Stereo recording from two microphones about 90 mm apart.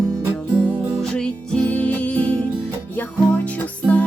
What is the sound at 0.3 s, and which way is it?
Music, 10° left (ahead or behind).